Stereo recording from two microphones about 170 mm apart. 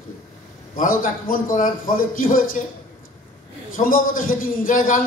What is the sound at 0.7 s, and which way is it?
A man's voice, 55° left (ahead or behind).